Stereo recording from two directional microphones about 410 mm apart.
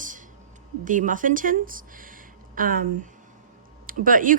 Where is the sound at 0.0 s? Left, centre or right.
Centre.